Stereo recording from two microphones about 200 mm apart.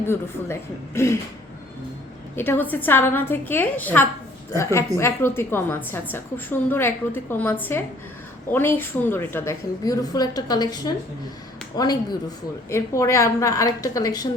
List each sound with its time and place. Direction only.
0.0 s a woman's voice: 10° left (ahead or behind)
2.3 s a woman's voice: 10° left (ahead or behind)